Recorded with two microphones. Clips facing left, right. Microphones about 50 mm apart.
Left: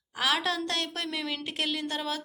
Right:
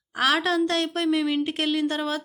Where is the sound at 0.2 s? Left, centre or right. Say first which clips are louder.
Right 6 dB; right.